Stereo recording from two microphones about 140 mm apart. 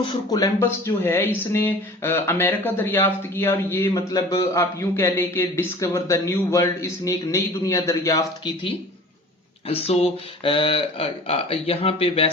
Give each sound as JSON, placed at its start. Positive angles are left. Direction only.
{"t": 0.0, "sound": "speech", "side_deg": 30}
{"t": 9.6, "sound": "speech", "side_deg": 45}